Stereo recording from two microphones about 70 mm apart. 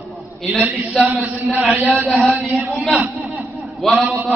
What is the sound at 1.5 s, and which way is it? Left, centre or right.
Mantra, right.